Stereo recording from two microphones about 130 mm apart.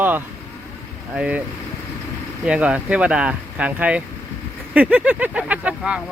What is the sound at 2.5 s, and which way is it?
Speech, 10° right (ahead or behind).